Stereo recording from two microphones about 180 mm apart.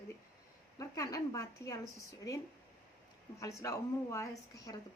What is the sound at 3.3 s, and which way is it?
A woman's voice, 15° left (ahead or behind).